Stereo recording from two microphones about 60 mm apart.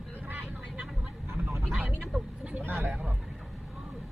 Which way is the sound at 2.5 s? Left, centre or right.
Right.